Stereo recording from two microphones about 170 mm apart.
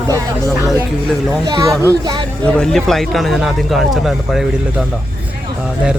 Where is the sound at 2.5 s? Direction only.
5° left (ahead or behind).